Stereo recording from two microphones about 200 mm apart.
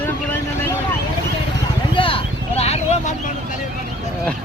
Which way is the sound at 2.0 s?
25° left (ahead or behind).